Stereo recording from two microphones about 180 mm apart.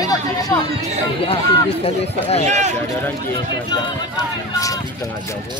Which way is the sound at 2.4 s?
40° right (ahead or behind).